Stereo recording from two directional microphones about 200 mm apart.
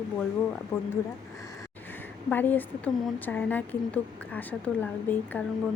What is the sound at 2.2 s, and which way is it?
Speech, 10° left (ahead or behind).